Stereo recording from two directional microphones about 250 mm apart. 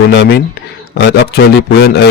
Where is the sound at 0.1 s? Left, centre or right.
Left.